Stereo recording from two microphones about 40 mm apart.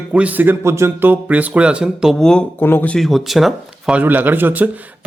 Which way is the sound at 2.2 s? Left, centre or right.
Centre.